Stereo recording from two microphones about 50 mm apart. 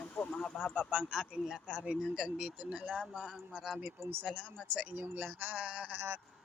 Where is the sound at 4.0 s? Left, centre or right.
Right.